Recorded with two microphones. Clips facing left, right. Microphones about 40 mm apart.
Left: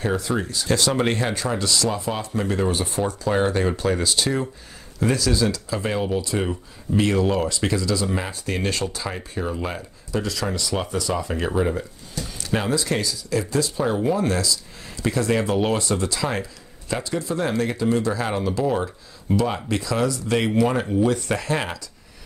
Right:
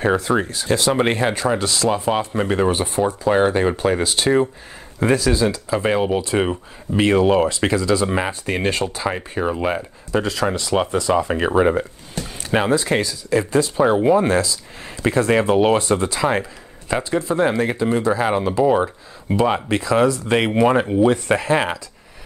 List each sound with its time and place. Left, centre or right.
0.0 s speech: right
0.7 s speech: right